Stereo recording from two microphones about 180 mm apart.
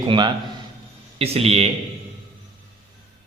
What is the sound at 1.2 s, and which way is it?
Speech, 35° right (ahead or behind).